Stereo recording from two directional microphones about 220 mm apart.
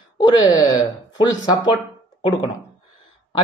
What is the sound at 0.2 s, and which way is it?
Speech, 15° left (ahead or behind).